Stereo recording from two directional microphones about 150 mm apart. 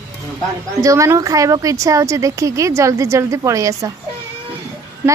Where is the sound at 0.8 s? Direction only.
20° right (ahead or behind).